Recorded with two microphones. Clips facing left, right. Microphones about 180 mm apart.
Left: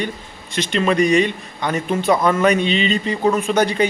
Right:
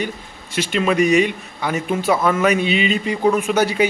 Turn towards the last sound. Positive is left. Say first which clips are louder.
# even
turn(degrees=-10)  # may be behind; listen again after turning